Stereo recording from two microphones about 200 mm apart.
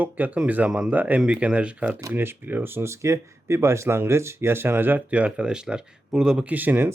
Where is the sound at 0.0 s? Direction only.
10° right (ahead or behind).